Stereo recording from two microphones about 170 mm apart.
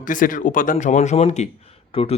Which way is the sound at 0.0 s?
50° left (ahead or behind).